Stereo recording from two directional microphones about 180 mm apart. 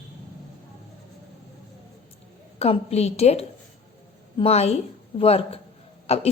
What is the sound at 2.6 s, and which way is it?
A woman's voice, 35° left (ahead or behind).